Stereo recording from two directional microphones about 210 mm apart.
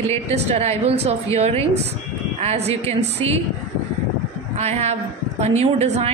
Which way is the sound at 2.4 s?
30° right (ahead or behind).